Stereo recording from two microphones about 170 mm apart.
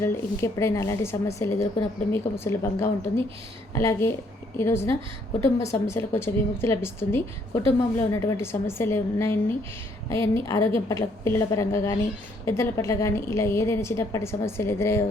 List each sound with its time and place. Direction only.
0.0 s speech: 15° left (ahead or behind)